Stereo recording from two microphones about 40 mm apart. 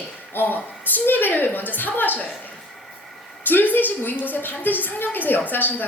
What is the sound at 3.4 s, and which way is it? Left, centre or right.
A woman's voice, left.